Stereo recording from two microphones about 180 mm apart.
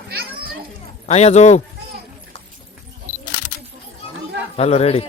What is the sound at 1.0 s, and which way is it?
Speech, 35° left (ahead or behind).